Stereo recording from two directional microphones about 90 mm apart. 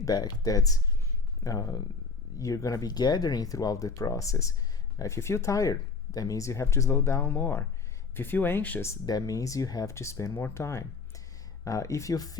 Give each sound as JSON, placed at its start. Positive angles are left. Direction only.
{"t": 0.0, "sound": "speech", "side_deg": 45}
{"t": 7.3, "sound": "speech", "side_deg": 20}
{"t": 9.0, "sound": "speech", "side_deg": 45}